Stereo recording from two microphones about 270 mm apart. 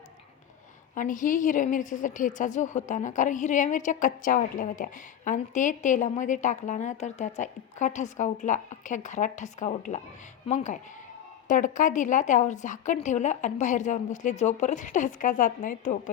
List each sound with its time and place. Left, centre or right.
0.9 s a woman's voice: left